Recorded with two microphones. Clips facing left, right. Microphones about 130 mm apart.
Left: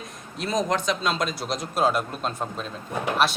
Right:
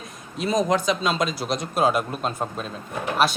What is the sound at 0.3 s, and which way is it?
Speech, centre (ahead or behind).